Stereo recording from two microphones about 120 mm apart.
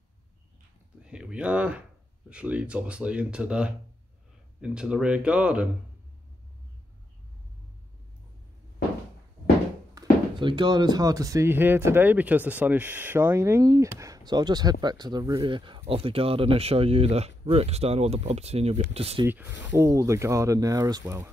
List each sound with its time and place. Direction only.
1.0 s speech: 10° right (ahead or behind)
10.0 s a sound: 30° right (ahead or behind)
10.3 s speech: 40° right (ahead or behind); by 19.2 s 55° right (ahead or behind)
19.2 s speech: 15° right (ahead or behind)